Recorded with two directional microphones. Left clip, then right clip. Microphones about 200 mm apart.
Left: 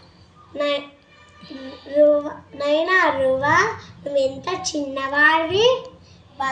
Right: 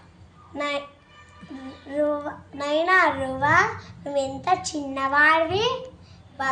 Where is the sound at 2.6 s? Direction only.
20° right (ahead or behind).